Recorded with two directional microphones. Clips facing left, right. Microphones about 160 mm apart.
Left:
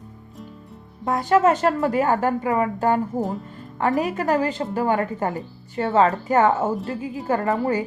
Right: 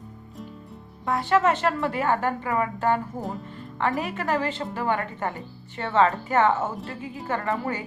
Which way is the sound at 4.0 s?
40° left (ahead or behind).